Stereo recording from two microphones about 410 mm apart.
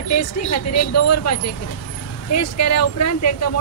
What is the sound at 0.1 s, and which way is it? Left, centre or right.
Speech, left.